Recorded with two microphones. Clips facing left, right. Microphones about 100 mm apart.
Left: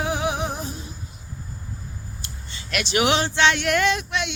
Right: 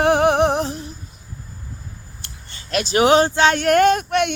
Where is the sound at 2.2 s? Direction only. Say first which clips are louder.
Left 2 dB; 55° right (ahead or behind).